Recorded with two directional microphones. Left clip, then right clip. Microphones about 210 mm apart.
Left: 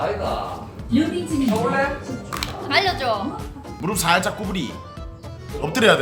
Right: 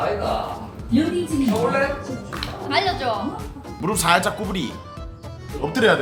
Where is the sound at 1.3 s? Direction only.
Centre (ahead or behind).